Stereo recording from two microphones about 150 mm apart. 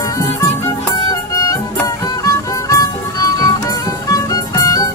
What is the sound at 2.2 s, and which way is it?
Music, 20° left (ahead or behind).